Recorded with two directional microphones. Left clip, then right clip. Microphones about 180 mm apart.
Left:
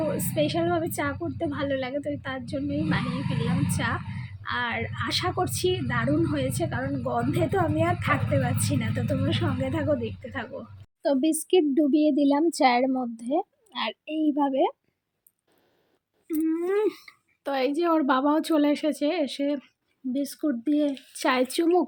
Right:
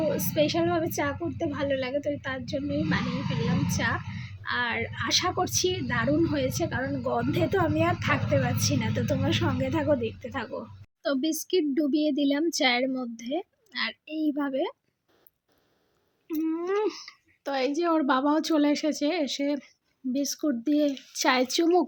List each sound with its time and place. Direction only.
0.2 s a woman's voice: centre (ahead or behind)
11.0 s speech: 10° left (ahead or behind)
16.2 s a woman's voice: 5° left (ahead or behind)